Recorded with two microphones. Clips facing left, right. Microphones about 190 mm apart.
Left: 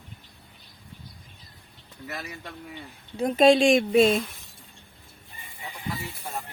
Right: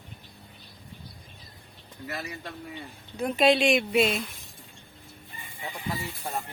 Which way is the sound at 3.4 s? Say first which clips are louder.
Left 4 dB; 45° left (ahead or behind).